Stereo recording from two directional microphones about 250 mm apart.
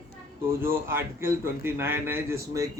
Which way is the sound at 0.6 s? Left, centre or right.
Centre.